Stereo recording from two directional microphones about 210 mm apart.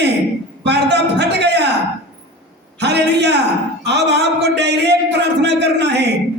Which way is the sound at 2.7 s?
55° right (ahead or behind).